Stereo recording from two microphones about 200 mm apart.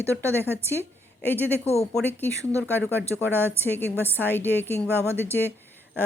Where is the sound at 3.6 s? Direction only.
10° left (ahead or behind).